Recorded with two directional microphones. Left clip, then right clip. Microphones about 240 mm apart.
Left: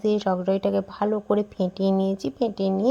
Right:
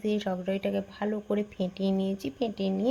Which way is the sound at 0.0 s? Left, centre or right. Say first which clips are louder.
Left 8 dB; left.